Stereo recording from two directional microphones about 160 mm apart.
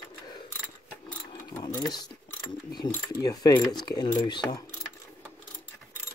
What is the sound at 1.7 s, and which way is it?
Mechanisms, 25° left (ahead or behind).